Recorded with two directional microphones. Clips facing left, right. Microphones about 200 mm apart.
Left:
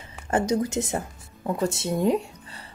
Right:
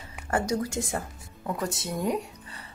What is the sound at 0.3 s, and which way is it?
A woman's voice, 20° left (ahead or behind).